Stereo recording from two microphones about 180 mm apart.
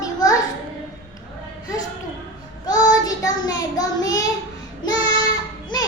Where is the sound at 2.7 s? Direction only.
20° left (ahead or behind).